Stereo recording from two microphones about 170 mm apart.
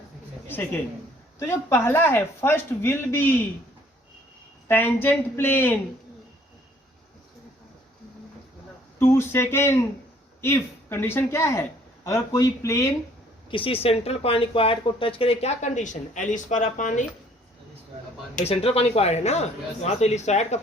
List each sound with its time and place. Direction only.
0.4 s a sound: 10° left (ahead or behind)
1.4 s speech: 15° left (ahead or behind)
4.7 s speech: 10° left (ahead or behind)
9.0 s speech: 15° left (ahead or behind)
13.5 s speech: 30° left (ahead or behind); by 17.1 s 45° left (ahead or behind)
18.3 s speech: 35° left (ahead or behind)